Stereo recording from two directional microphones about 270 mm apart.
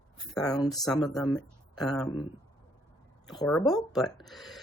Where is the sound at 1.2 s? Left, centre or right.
Centre.